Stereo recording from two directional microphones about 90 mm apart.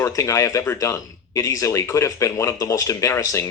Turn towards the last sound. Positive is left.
turn(degrees=40)  # may be behind; listen again after turning